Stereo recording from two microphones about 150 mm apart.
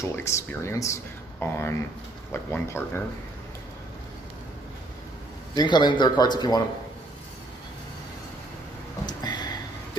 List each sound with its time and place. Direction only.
0.0 s speech: 20° left (ahead or behind)
5.6 s speech: 30° left (ahead or behind)
9.0 s a sound: 30° left (ahead or behind)